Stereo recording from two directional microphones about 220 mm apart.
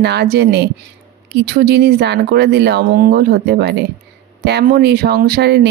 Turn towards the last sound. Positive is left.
turn(degrees=-50)  # may be behind; listen again after turning